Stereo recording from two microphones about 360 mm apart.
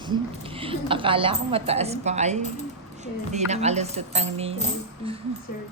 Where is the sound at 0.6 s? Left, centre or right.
Centre.